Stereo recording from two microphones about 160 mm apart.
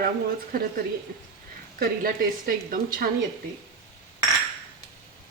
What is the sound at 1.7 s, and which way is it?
Speech, 75° right (ahead or behind).